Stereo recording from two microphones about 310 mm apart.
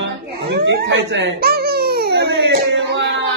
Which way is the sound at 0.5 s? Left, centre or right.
Right.